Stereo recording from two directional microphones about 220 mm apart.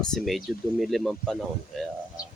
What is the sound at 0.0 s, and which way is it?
Speech, centre (ahead or behind).